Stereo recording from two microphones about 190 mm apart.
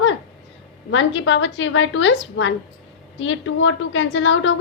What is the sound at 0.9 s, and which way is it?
A woman's voice, 90° left.